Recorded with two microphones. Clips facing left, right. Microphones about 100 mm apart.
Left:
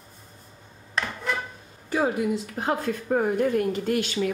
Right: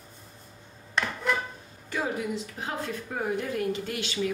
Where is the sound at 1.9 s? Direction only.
45° left (ahead or behind).